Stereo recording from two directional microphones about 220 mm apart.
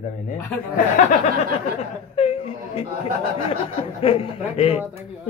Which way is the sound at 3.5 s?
25° left (ahead or behind).